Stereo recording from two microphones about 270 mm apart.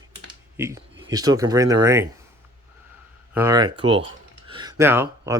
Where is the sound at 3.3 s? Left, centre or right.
Centre.